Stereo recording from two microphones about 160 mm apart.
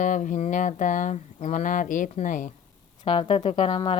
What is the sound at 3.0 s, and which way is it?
Speech, 35° left (ahead or behind).